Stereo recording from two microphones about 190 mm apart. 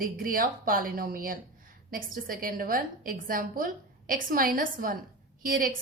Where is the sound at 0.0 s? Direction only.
50° right (ahead or behind).